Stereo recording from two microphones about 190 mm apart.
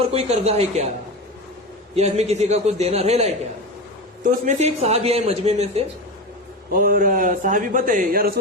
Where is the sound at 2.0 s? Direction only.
35° right (ahead or behind).